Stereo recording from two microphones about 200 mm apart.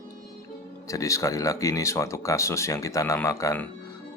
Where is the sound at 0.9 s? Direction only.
15° left (ahead or behind).